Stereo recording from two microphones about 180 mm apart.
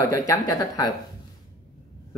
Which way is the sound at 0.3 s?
20° left (ahead or behind).